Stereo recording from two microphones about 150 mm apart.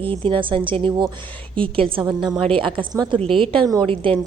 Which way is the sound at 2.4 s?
35° right (ahead or behind).